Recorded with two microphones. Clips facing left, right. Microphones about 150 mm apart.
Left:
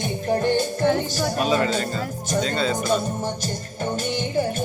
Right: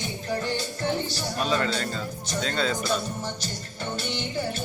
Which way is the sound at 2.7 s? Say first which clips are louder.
Left 5 dB; 50° left (ahead or behind).